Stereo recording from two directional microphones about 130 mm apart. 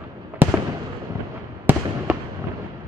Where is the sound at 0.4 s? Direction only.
15° right (ahead or behind).